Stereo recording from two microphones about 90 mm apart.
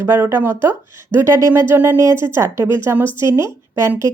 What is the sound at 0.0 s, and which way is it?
A woman's voice, 25° right (ahead or behind).